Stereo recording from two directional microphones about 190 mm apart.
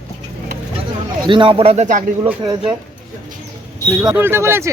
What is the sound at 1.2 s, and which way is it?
Speech, 25° right (ahead or behind).